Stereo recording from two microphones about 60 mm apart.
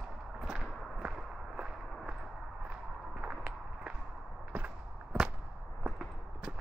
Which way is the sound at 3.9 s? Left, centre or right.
Centre.